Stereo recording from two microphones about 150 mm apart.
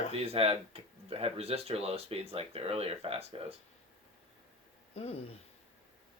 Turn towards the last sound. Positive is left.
turn(degrees=40)  # may be behind; listen again after turning